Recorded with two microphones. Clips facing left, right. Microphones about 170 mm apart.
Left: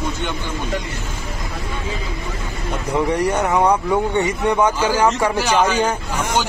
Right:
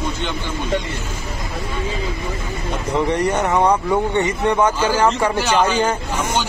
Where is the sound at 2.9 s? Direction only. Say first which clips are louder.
Even; 10° left (ahead or behind).